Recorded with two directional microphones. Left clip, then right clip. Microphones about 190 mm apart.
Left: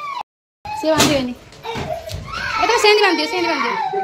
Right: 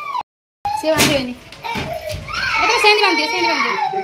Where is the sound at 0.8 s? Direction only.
15° left (ahead or behind).